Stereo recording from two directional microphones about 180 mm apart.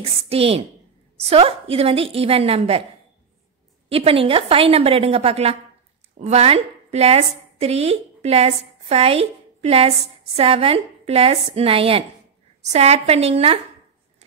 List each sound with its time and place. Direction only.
0.0 s a woman's voice: 35° right (ahead or behind)
3.9 s a woman's voice: 30° right (ahead or behind)